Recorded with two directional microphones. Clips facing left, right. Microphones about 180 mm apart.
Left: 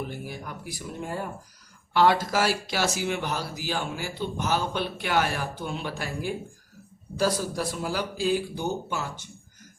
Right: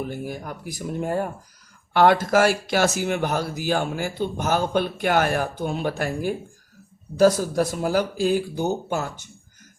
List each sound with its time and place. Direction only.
0.0 s speech: 45° right (ahead or behind)